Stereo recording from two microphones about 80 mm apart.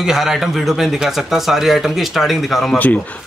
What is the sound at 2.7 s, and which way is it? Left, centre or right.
Speech, left.